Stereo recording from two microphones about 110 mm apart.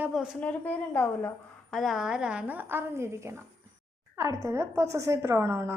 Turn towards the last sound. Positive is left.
turn(degrees=-25)  # may be behind; listen again after turning